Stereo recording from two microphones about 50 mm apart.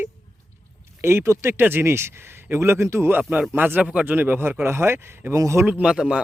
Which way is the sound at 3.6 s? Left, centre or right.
Right.